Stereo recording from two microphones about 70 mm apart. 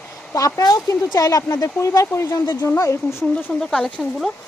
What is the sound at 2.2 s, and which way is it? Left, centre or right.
Speech, left.